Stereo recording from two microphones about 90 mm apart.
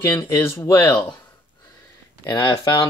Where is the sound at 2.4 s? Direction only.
55° left (ahead or behind).